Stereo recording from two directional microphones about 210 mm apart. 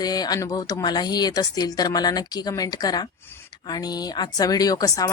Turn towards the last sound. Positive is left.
turn(degrees=15)  # may be behind; listen again after turning